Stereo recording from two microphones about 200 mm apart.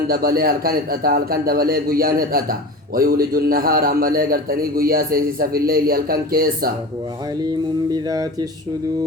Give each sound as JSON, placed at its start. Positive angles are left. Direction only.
{"t": 0.1, "sound": "a man's voice", "side_deg": -50}
{"t": 7.9, "sound": "speech", "side_deg": -20}